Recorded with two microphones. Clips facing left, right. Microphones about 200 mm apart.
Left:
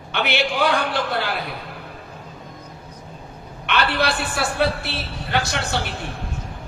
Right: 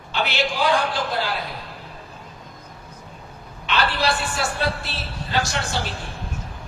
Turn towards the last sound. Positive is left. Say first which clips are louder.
# left 1 dB
turn(degrees=60)  # may be behind; listen again after turning